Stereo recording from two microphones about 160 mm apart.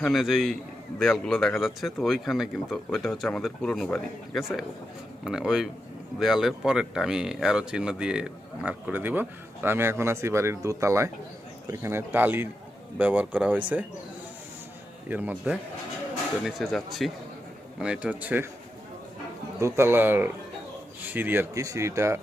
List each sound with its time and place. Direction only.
0.0 s a man's voice: centre (ahead or behind)
15.1 s a man's voice: 10° right (ahead or behind)
19.5 s speech: 15° right (ahead or behind)